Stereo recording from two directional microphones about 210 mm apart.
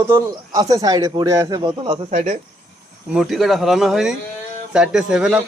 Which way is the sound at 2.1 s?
35° right (ahead or behind).